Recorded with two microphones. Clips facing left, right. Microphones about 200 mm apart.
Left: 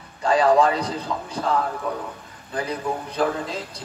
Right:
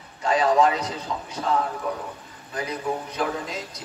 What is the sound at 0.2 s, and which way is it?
A man's voice, 30° left (ahead or behind).